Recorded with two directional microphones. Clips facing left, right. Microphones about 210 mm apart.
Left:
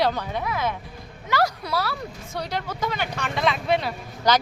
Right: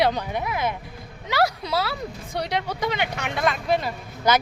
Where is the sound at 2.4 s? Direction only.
70° right (ahead or behind).